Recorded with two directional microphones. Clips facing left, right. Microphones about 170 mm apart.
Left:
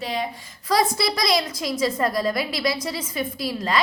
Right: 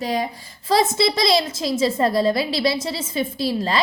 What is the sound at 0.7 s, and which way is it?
A woman's voice, 25° right (ahead or behind).